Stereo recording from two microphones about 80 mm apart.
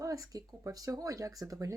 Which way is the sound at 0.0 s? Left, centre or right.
Right.